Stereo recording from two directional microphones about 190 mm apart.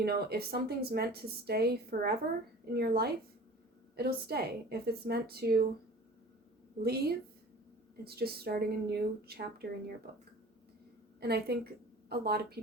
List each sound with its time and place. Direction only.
0.0 s a woman's voice: 55° right (ahead or behind)
6.8 s a woman's voice: 55° right (ahead or behind)